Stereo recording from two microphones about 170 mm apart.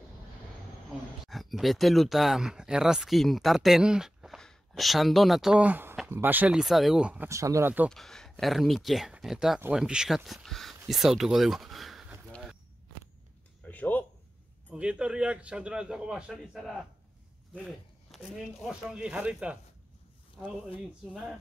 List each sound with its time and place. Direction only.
1.2 s speech: centre (ahead or behind)
7.2 s speech: 20° right (ahead or behind)
7.9 s a man's voice: 5° left (ahead or behind)
10.9 s a sound: centre (ahead or behind)
13.7 s a sound: 10° left (ahead or behind)
14.7 s a man's voice: 5° right (ahead or behind)
21.1 s a man's voice: 5° right (ahead or behind)